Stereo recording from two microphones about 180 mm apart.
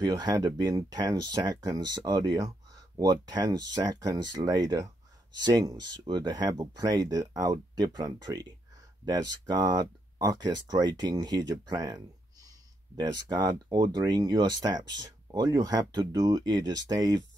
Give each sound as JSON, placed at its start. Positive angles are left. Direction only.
{"t": 0.0, "sound": "speech", "side_deg": -20}